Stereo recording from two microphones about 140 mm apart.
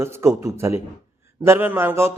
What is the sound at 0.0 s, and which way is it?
A man's voice, 20° right (ahead or behind).